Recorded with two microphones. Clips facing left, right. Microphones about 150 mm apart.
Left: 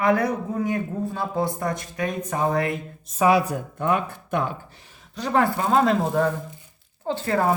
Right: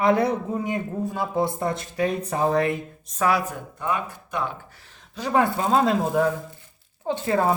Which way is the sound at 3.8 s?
55° left (ahead or behind).